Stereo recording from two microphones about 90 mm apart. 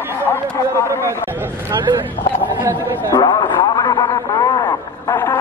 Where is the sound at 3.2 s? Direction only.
55° left (ahead or behind).